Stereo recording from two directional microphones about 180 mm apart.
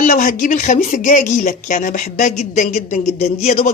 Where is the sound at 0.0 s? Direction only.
45° left (ahead or behind).